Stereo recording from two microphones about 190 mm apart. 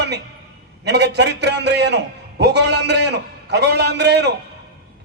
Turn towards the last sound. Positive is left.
turn(degrees=-60)  # may be behind; listen again after turning